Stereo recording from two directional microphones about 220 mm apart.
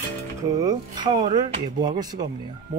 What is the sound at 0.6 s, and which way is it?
Speech, 20° right (ahead or behind).